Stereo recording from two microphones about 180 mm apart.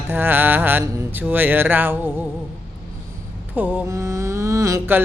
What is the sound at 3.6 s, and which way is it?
Mantra, 10° right (ahead or behind).